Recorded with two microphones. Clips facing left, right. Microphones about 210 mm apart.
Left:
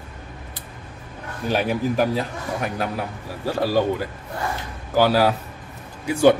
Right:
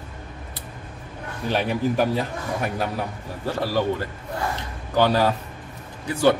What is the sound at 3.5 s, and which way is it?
Speech, 10° left (ahead or behind).